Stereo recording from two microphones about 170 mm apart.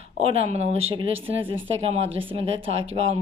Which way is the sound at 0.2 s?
35° right (ahead or behind).